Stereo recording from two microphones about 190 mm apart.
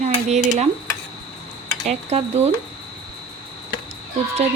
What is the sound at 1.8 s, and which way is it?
Speech, 35° right (ahead or behind).